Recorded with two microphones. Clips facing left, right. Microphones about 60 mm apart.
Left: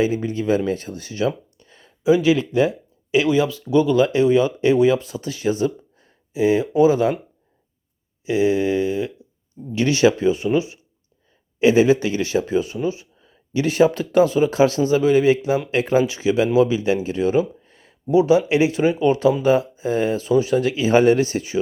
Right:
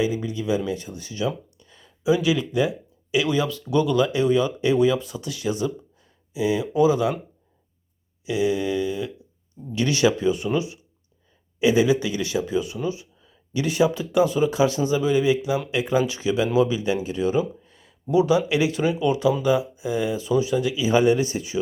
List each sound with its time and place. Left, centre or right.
0.0 s speech: left
8.2 s speech: left